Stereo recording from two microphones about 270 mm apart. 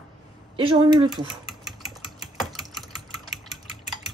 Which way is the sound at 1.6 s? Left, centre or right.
Centre.